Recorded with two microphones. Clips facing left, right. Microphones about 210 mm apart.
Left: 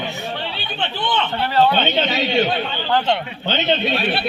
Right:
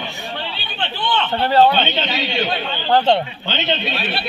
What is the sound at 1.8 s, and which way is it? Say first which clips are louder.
Speech: left 2 dB; 45° left (ahead or behind).